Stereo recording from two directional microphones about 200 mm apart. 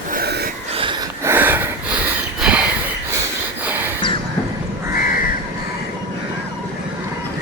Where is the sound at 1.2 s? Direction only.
10° right (ahead or behind).